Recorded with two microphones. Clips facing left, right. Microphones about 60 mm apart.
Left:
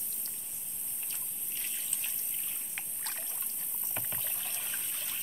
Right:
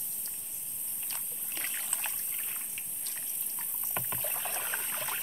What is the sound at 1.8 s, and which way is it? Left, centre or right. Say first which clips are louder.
Water: right 5 dB; right.